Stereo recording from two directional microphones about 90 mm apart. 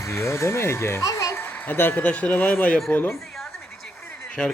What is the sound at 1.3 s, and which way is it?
Speech, 20° left (ahead or behind).